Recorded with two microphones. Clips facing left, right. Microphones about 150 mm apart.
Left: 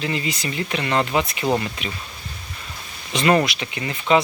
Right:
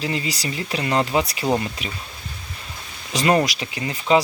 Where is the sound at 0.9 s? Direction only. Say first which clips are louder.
Right 1 dB; 20° right (ahead or behind).